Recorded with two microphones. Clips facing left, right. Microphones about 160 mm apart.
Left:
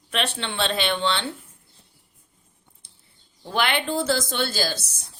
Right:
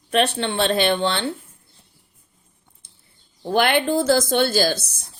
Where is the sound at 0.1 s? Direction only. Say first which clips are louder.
Right 8 dB; 45° right (ahead or behind).